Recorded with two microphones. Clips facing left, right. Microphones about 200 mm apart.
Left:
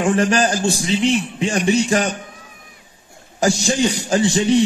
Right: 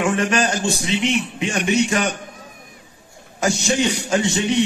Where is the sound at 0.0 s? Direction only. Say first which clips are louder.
Left 3 dB; 35° left (ahead or behind).